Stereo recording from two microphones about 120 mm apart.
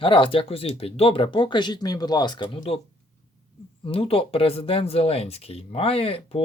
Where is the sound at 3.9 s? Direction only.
50° left (ahead or behind).